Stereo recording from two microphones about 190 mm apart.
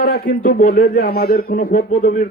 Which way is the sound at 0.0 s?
55° left (ahead or behind).